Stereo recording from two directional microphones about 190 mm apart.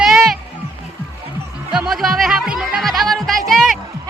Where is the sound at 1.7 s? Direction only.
Centre (ahead or behind).